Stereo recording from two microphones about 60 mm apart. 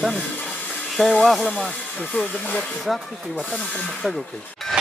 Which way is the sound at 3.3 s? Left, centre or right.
Centre.